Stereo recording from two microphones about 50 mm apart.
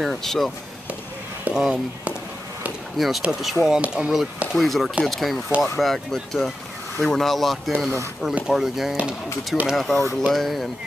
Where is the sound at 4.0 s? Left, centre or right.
Centre.